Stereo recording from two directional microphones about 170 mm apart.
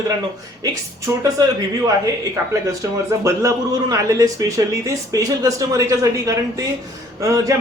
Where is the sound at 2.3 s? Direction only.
20° right (ahead or behind).